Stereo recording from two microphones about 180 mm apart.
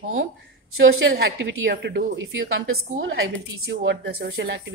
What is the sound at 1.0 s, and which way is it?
A woman's voice, 90° right.